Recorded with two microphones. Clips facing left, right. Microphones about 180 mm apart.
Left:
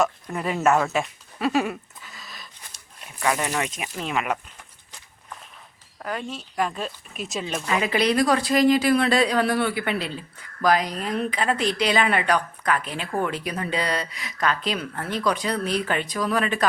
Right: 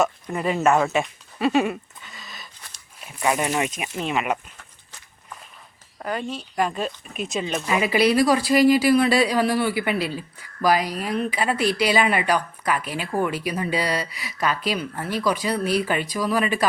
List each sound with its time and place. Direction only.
0.3 s speech: centre (ahead or behind)
3.2 s speech: 20° right (ahead or behind)
4.0 s speech: 5° right (ahead or behind)
6.0 s speech: centre (ahead or behind)